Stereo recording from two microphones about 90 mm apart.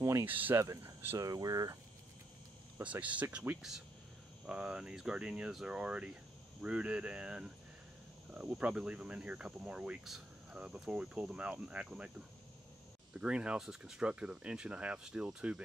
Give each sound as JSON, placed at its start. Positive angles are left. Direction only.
{"t": 0.2, "sound": "cricket", "side_deg": -20}
{"t": 0.6, "sound": "speech", "side_deg": -30}
{"t": 2.8, "sound": "speech", "side_deg": -15}
{"t": 13.1, "sound": "speech", "side_deg": -10}